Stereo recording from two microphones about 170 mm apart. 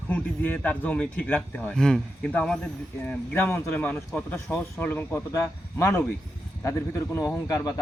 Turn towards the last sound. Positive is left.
turn(degrees=20)  # may be behind; listen again after turning